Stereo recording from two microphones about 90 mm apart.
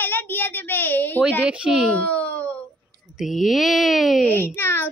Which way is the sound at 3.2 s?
5° right (ahead or behind).